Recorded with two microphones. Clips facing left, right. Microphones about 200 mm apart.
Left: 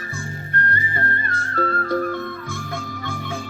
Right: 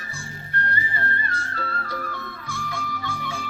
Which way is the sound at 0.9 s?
50° left (ahead or behind).